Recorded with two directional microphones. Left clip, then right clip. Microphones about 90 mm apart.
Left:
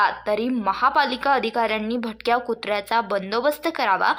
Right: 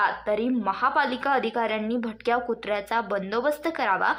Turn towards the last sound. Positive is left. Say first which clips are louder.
# left 4 dB
turn(degrees=15)  # may be behind; listen again after turning